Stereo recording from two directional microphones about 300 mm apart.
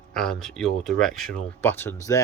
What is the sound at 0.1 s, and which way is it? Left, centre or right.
Speech, centre.